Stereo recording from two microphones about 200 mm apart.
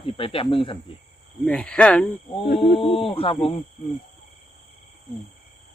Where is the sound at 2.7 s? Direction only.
25° left (ahead or behind).